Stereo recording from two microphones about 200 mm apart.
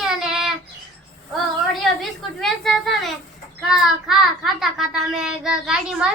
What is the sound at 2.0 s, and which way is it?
A child's voice, centre (ahead or behind).